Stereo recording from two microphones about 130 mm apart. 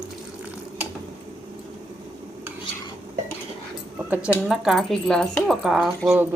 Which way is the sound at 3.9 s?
10° right (ahead or behind).